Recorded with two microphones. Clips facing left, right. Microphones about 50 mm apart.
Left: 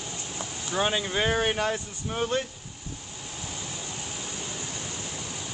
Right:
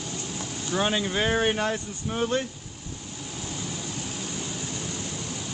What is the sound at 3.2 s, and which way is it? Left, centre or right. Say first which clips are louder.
Vehicle: right 3 dB; centre.